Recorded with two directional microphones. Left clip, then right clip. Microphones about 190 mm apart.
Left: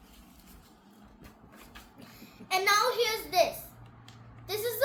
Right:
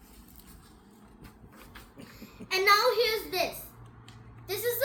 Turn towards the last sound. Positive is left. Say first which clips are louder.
# left 1 dB
turn(degrees=10)  # may be behind; listen again after turning